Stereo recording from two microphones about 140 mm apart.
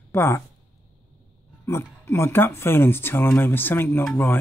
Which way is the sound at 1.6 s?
20° left (ahead or behind).